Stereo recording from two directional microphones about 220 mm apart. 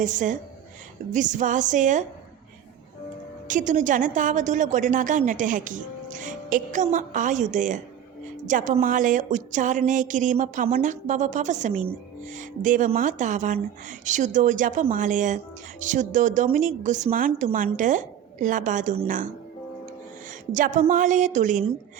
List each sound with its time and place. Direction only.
0.0 s speech: 35° right (ahead or behind)
3.4 s speech: 35° right (ahead or behind)
20.5 s speech: 35° right (ahead or behind)